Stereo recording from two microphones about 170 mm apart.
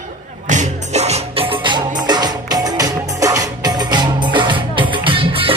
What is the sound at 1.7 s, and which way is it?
Music, 25° right (ahead or behind).